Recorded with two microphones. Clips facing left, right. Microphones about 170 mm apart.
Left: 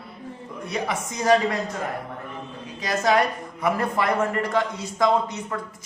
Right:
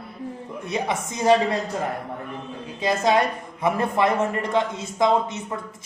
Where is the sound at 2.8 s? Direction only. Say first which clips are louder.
Right 1 dB; 25° right (ahead or behind).